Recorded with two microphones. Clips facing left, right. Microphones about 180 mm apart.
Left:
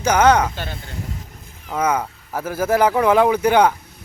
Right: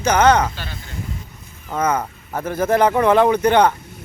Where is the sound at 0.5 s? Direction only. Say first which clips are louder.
Left 3 dB; 50° left (ahead or behind).